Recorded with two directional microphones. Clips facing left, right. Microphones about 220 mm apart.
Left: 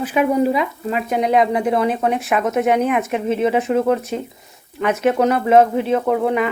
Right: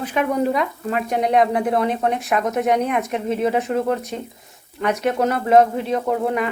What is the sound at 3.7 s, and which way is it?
Speech, 30° left (ahead or behind).